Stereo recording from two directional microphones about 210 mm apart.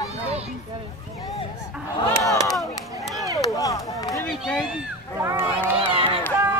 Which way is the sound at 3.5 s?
15° left (ahead or behind).